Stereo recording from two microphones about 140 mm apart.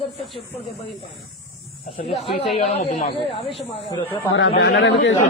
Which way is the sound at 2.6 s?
45° left (ahead or behind).